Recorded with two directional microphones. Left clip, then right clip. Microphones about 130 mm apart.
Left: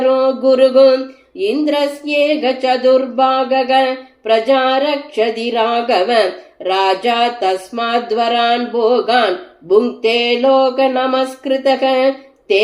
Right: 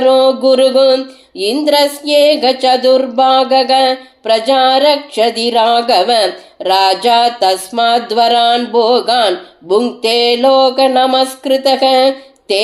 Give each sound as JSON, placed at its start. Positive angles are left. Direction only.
{"t": 0.0, "sound": "speech", "side_deg": -20}